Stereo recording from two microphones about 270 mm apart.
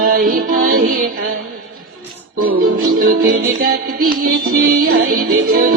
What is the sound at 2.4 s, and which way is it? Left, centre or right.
Music, right.